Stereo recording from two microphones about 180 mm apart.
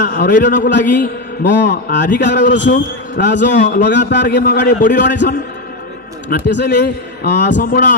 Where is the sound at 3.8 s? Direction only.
75° left (ahead or behind).